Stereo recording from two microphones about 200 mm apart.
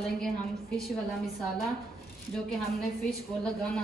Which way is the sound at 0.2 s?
Centre (ahead or behind).